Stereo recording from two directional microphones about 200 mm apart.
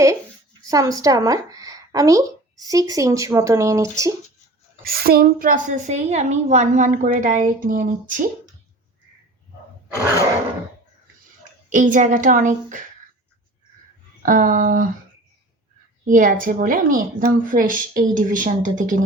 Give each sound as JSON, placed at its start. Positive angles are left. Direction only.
{"t": 0.7, "sound": "a woman's voice", "side_deg": -15}
{"t": 4.8, "sound": "a woman's voice", "side_deg": -50}
{"t": 11.7, "sound": "a woman's voice", "side_deg": -40}
{"t": 14.2, "sound": "a woman's voice", "side_deg": -40}
{"t": 16.0, "sound": "a woman's voice", "side_deg": -40}